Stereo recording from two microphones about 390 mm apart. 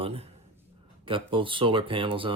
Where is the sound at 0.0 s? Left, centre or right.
Centre.